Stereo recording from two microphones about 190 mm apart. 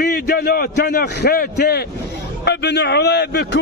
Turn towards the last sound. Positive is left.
turn(degrees=60)  # may be behind; listen again after turning